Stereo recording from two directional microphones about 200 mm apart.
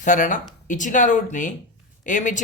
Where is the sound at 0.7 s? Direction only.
40° left (ahead or behind).